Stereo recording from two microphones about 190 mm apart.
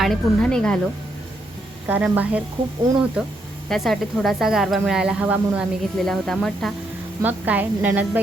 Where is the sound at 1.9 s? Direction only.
10° right (ahead or behind).